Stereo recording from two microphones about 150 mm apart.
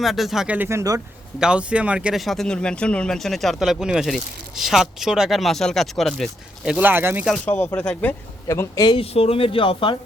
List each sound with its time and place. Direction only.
0.0 s speech: centre (ahead or behind); by 1.0 s 20° right (ahead or behind)
1.4 s speech: 5° right (ahead or behind)
7.4 s speech: 15° left (ahead or behind)
8.4 s speech: 20° left (ahead or behind)
9.0 s speech: 40° left (ahead or behind)